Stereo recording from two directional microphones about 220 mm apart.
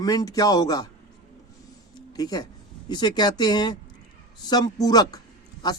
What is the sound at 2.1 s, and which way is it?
Speech, 15° left (ahead or behind).